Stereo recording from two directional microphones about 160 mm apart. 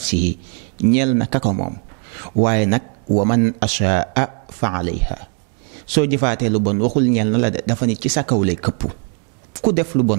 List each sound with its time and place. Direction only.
0.0 s speech: 5° right (ahead or behind)